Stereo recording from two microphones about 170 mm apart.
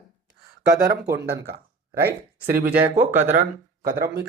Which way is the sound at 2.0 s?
65° right (ahead or behind).